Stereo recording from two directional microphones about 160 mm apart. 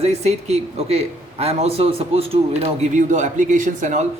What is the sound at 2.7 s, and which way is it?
Speech, 50° right (ahead or behind).